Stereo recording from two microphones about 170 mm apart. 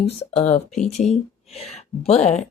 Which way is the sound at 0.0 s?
40° left (ahead or behind).